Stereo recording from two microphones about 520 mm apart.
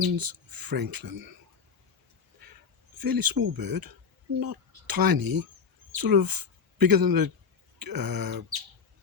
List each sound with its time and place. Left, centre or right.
0.0 s speech: right
3.0 s speech: right